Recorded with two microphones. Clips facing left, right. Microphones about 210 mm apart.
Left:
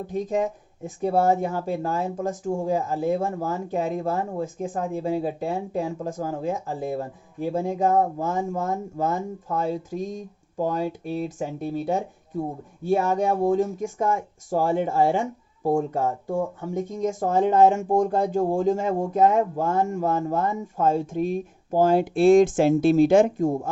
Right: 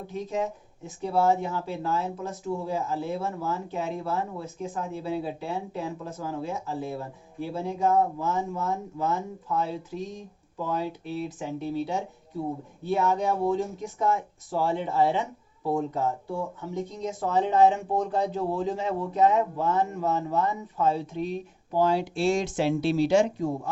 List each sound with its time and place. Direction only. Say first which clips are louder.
0.1 s speech: left 5 dB; 50° left (ahead or behind)